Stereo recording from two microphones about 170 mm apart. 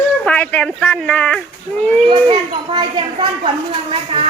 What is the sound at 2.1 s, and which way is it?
Speech, 30° right (ahead or behind).